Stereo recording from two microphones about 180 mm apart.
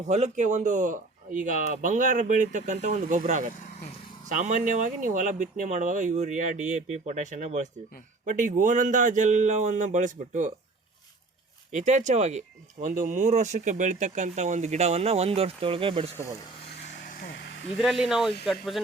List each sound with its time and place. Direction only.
0.0 s a man's voice: 40° right (ahead or behind)
11.7 s speech: 40° right (ahead or behind)
16.7 s vehicle: 65° left (ahead or behind)
17.7 s speech: centre (ahead or behind)